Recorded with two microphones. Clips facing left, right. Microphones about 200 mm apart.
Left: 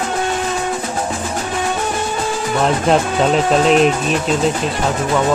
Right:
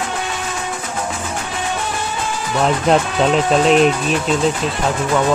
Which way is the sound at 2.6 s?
Centre (ahead or behind).